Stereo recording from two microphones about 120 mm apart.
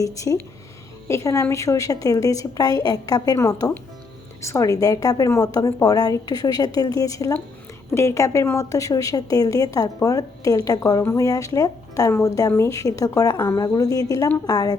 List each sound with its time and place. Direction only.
0.0 s a woman's voice: 30° left (ahead or behind)